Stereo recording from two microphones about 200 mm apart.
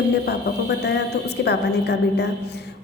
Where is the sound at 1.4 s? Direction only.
55° left (ahead or behind).